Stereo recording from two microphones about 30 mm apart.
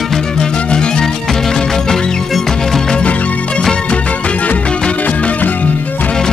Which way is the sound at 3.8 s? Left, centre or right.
Left.